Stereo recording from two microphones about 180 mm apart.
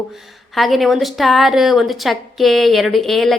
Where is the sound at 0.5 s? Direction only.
Centre (ahead or behind).